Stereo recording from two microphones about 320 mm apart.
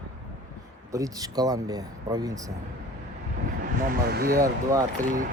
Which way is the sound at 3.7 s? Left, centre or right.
Right.